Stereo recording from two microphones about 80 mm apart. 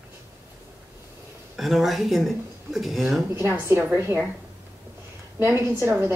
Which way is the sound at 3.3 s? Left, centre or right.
Right.